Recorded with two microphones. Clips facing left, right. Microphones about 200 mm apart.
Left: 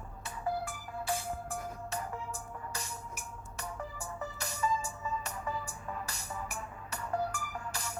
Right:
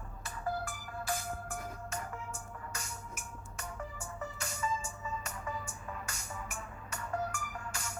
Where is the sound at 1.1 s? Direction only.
30° left (ahead or behind).